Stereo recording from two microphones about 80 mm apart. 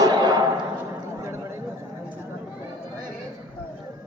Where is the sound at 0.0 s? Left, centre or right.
Right.